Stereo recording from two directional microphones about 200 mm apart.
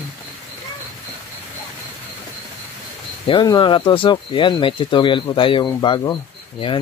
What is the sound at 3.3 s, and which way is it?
Speech, 25° left (ahead or behind).